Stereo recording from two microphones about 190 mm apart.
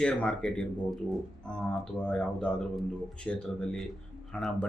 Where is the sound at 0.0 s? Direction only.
5° left (ahead or behind).